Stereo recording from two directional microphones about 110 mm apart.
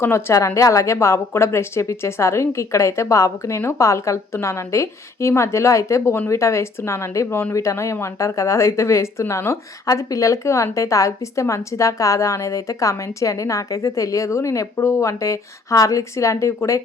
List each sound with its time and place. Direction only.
0.0 s speech: 25° left (ahead or behind)